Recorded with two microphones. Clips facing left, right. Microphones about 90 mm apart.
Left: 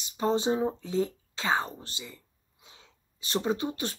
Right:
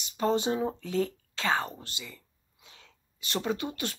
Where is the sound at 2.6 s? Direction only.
20° left (ahead or behind).